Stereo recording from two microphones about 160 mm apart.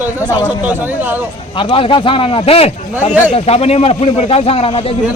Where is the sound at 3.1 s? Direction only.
10° right (ahead or behind).